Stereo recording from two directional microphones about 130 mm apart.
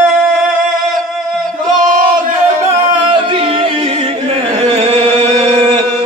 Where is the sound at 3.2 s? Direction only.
45° right (ahead or behind).